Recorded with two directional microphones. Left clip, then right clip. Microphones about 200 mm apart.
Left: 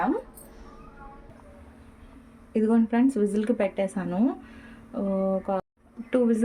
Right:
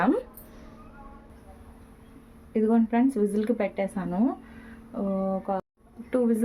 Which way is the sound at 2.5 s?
Centre (ahead or behind).